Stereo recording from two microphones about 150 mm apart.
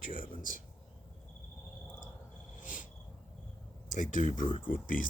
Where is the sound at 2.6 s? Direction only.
60° left (ahead or behind).